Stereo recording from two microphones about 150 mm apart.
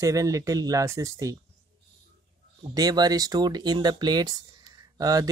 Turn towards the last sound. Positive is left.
turn(degrees=-25)  # may be behind; listen again after turning